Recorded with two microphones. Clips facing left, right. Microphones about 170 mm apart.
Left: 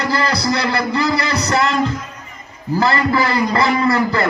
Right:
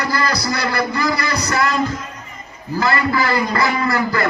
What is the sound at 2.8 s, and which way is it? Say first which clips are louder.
A man's voice: left 2 dB; 30° left (ahead or behind).